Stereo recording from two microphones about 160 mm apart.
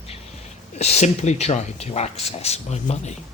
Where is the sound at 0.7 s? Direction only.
45° left (ahead or behind).